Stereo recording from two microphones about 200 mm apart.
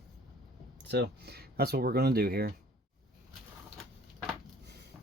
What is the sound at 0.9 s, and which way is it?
Speech, 60° right (ahead or behind).